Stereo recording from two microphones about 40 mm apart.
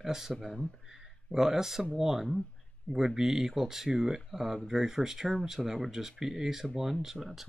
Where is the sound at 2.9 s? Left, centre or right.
Left.